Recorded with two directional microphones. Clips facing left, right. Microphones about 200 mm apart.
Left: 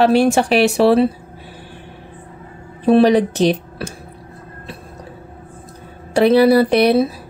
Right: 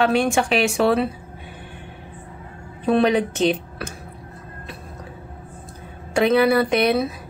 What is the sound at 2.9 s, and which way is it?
Speech, 35° left (ahead or behind).